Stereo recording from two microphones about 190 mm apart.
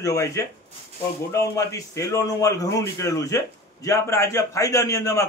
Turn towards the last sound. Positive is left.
turn(degrees=15)  # may be behind; listen again after turning